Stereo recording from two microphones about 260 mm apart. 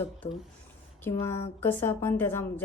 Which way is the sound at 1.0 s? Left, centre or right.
Centre.